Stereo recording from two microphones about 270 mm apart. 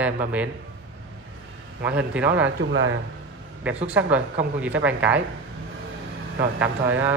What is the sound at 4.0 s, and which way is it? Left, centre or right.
A man's voice, centre.